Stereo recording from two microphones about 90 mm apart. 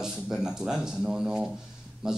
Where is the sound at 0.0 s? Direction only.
5° right (ahead or behind).